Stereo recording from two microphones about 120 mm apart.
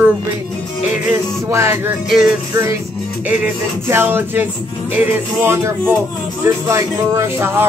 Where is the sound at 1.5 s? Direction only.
20° right (ahead or behind).